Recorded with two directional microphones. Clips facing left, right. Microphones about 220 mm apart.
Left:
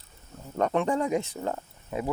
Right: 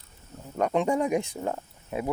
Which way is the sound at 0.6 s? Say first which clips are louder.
Right 1 dB; 10° right (ahead or behind).